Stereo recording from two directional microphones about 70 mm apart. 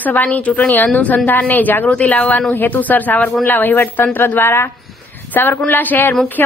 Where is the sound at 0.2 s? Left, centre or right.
Left.